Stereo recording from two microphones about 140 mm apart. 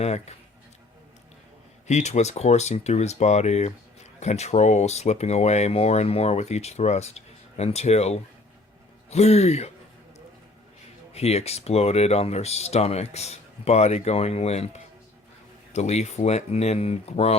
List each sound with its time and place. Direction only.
0.0 s speech: 50° left (ahead or behind)
1.9 s speech: 55° left (ahead or behind)
11.1 s speech: 50° left (ahead or behind)